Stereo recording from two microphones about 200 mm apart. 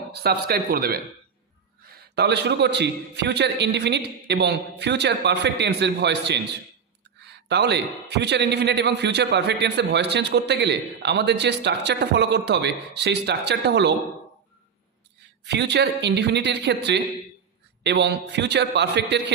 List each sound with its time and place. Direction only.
0.1 s speech: 55° right (ahead or behind)
2.1 s a man's voice: 55° right (ahead or behind)
15.4 s a man's voice: 60° right (ahead or behind)